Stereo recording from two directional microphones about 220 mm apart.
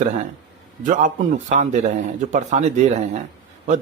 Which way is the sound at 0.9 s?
35° right (ahead or behind).